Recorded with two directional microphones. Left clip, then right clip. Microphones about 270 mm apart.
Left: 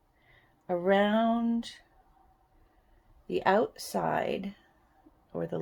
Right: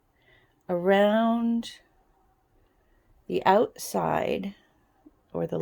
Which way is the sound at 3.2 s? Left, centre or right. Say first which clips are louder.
Right 4 dB; right.